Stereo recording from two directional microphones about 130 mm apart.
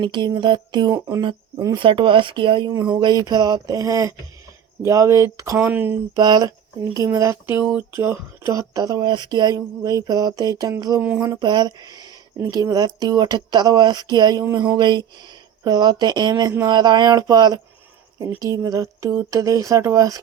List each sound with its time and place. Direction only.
0.0 s speech: 35° right (ahead or behind)
0.9 s speech: 20° right (ahead or behind)
1.2 s speech: 35° right (ahead or behind)
5.5 s speech: 10° right (ahead or behind)
6.1 s speech: 30° right (ahead or behind)